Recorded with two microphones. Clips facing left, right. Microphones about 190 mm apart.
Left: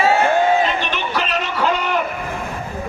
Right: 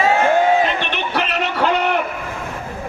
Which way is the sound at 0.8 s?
60° right (ahead or behind).